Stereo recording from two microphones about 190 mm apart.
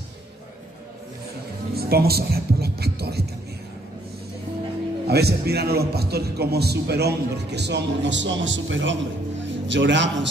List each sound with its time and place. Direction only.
1.8 s music: 55° right (ahead or behind)
5.0 s a man's voice: 55° right (ahead or behind); by 10.2 s 70° right (ahead or behind)